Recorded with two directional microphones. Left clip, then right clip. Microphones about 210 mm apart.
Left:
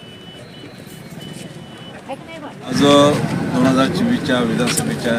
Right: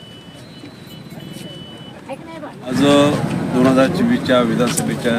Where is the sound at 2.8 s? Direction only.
5° right (ahead or behind).